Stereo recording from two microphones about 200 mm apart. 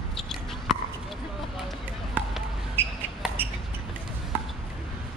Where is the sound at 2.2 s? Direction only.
10° right (ahead or behind).